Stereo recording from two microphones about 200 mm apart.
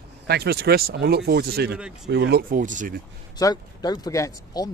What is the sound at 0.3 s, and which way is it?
Speech, 55° right (ahead or behind).